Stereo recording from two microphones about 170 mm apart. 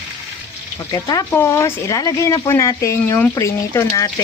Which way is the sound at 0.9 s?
20° left (ahead or behind).